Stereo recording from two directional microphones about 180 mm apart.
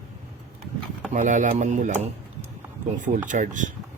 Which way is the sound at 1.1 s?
45° right (ahead or behind).